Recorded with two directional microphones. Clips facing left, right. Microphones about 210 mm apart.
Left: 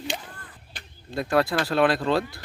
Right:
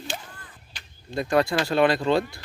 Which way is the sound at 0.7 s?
55° left (ahead or behind).